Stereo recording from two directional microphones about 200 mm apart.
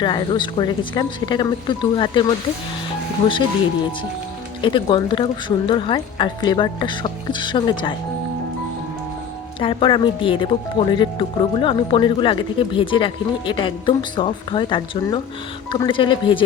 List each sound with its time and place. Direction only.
0.0 s speech: 20° left (ahead or behind)
4.6 s speech: 25° left (ahead or behind)
9.6 s speech: 25° left (ahead or behind)